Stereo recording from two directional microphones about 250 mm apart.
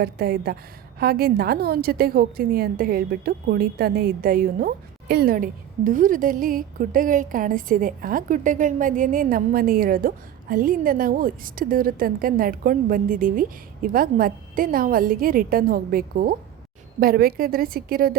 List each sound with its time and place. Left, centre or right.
0.0 s a woman's voice: right